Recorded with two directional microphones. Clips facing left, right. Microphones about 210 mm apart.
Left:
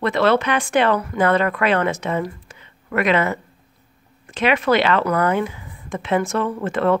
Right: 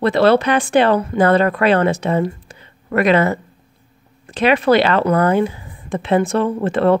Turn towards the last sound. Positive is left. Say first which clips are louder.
# right 4 dB
turn(degrees=-30)  # may be behind; listen again after turning